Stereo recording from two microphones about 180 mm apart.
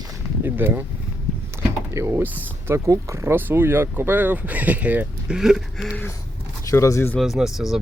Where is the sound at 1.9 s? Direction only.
15° right (ahead or behind).